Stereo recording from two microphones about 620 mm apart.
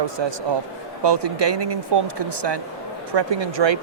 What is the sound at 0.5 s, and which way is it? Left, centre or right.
Speech, right.